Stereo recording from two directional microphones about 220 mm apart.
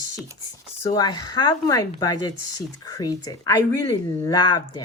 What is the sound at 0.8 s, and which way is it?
Speech, 20° left (ahead or behind).